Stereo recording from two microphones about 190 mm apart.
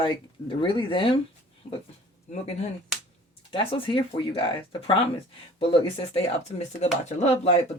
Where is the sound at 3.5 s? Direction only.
25° left (ahead or behind).